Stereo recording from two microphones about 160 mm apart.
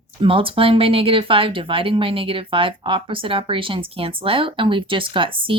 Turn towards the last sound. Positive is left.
turn(degrees=-35)  # may be behind; listen again after turning